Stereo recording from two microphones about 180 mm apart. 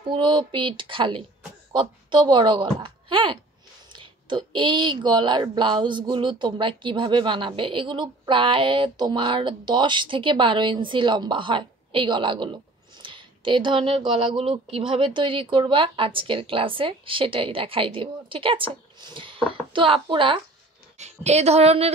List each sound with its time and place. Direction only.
0.1 s a woman's voice: 25° right (ahead or behind)
21.0 s a woman's voice: 40° right (ahead or behind)